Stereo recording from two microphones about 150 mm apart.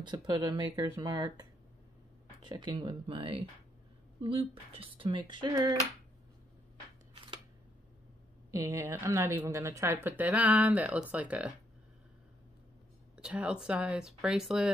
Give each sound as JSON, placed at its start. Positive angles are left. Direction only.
{"t": 0.0, "sound": "speech", "side_deg": -30}
{"t": 8.5, "sound": "a woman's voice", "side_deg": -20}
{"t": 13.2, "sound": "speech", "side_deg": -5}